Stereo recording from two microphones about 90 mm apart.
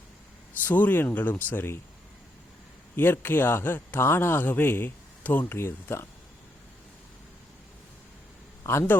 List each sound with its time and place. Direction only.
0.6 s speech: 20° left (ahead or behind)
2.9 s speech: 25° left (ahead or behind)
8.6 s speech: 25° left (ahead or behind)